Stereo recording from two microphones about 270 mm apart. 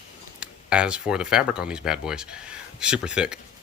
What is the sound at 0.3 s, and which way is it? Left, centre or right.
Speech, centre.